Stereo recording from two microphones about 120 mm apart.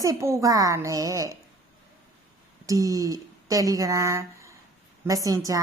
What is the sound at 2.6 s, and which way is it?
A woman's voice, 25° right (ahead or behind).